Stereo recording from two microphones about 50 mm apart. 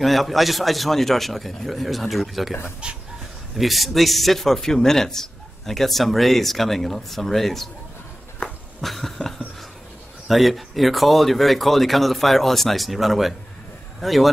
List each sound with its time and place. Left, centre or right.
0.0 s speech: centre
2.8 s a sound: centre
3.5 s speech: centre
8.8 s cough: centre
10.2 s speech: centre